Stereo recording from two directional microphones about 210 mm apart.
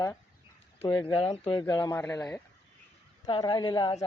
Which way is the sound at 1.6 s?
15° left (ahead or behind).